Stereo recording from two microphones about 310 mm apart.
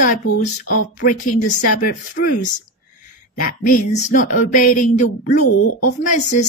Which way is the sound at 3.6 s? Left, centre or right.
Left.